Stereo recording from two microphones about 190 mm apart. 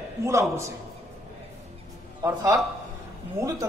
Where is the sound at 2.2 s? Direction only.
15° right (ahead or behind).